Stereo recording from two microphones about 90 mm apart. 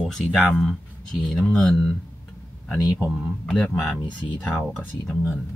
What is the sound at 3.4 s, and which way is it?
Speech, 5° left (ahead or behind).